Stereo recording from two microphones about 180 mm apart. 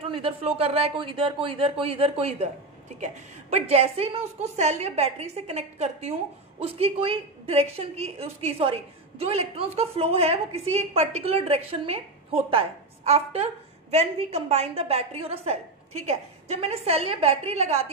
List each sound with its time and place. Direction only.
0.0 s a woman's voice: 30° right (ahead or behind)